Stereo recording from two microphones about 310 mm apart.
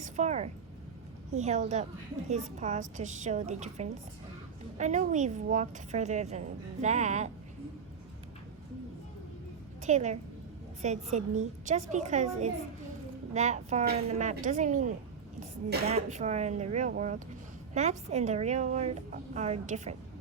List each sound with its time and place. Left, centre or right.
0.0 s a woman's voice: right
9.8 s a woman's voice: right